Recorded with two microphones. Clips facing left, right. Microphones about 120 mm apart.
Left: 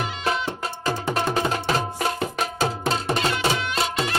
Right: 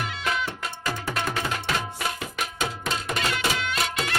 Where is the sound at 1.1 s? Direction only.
30° left (ahead or behind).